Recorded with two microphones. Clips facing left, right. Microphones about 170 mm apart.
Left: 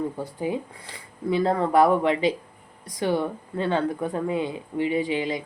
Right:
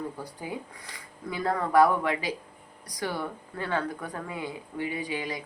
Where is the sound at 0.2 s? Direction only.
25° left (ahead or behind).